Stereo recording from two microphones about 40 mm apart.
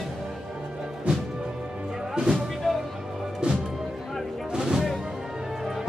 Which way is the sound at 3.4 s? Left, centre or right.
Right.